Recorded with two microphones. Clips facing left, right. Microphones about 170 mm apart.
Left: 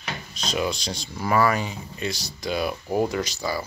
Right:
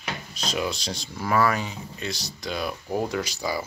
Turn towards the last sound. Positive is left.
turn(degrees=-15)  # may be behind; listen again after turning